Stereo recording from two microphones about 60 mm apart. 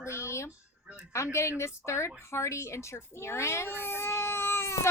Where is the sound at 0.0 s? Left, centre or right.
Left.